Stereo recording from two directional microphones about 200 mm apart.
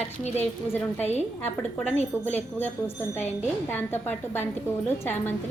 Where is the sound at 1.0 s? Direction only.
35° left (ahead or behind).